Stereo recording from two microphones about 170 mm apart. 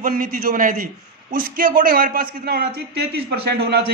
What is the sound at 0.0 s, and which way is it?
A man's voice, 55° right (ahead or behind).